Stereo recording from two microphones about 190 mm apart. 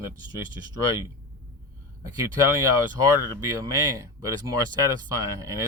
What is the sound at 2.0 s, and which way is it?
Speech, 20° right (ahead or behind).